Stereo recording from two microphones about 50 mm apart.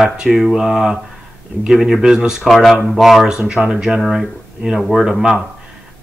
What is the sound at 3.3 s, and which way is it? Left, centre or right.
Speech, centre.